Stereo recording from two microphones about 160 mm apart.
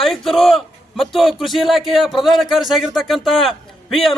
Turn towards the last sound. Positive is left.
turn(degrees=0)  # may be behind; listen again after turning